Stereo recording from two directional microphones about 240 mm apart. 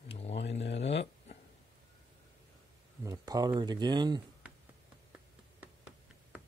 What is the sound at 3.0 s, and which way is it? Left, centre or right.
Speech, centre.